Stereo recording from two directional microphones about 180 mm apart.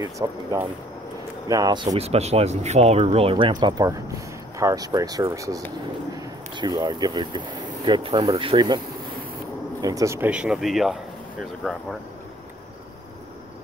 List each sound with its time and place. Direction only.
0.0 s speech: 20° right (ahead or behind); by 11.8 s centre (ahead or behind)